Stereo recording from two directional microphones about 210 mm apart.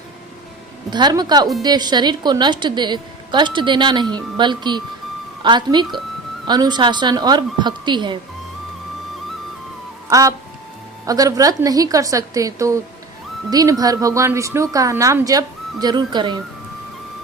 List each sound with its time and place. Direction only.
0.9 s a woman's voice: 20° right (ahead or behind)
10.1 s music: 15° right (ahead or behind)
11.0 s a woman's voice: 15° right (ahead or behind)